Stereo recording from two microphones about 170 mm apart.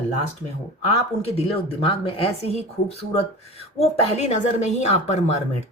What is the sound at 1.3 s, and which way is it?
Speech, 35° left (ahead or behind).